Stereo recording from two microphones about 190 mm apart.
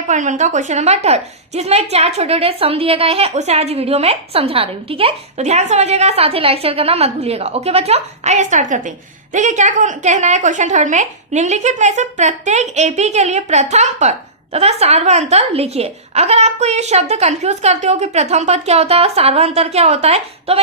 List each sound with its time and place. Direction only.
0.1 s a woman's voice: 40° right (ahead or behind)